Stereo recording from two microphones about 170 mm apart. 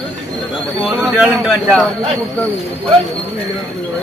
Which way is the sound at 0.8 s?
Centre (ahead or behind).